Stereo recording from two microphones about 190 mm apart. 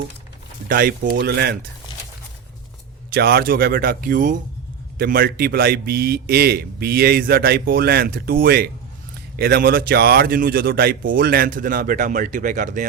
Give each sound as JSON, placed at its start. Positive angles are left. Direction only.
{"t": 0.7, "sound": "a man's voice", "side_deg": -50}
{"t": 3.1, "sound": "a man's voice", "side_deg": -55}